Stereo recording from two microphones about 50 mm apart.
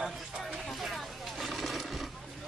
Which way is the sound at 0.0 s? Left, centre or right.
Centre.